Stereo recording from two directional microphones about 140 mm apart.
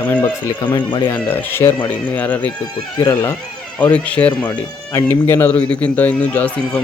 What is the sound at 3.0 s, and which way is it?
Speech, 25° left (ahead or behind).